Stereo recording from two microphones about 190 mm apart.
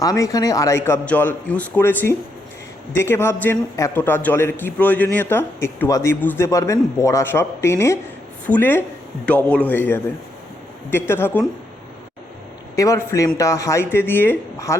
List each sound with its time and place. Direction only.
0.0 s a man's voice: 20° left (ahead or behind)
12.7 s a man's voice: 15° left (ahead or behind)